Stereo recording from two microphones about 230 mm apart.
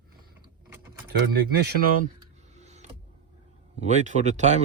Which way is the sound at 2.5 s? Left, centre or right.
Right.